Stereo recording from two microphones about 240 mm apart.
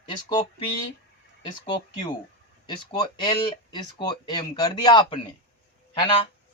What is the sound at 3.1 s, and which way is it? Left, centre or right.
Speech, centre.